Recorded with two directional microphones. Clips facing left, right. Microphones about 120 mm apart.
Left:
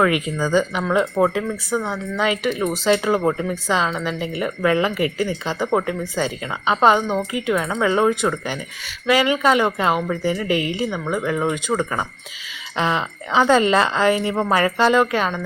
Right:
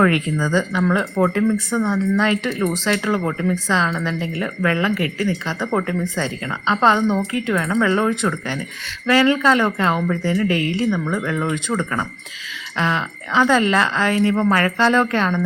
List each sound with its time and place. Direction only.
0.0 s speech: 10° left (ahead or behind)